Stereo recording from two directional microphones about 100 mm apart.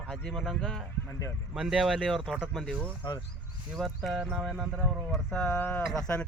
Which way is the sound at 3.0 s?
50° left (ahead or behind).